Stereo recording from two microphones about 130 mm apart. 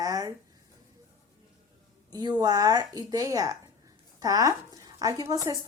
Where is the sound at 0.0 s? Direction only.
25° right (ahead or behind).